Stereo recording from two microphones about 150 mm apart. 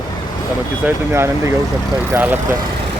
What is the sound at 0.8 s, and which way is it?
Speech, 15° right (ahead or behind).